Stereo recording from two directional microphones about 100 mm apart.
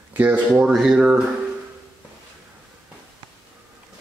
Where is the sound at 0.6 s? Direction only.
5° right (ahead or behind).